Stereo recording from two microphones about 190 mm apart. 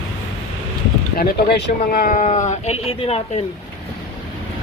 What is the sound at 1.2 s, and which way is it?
Speech, 60° left (ahead or behind).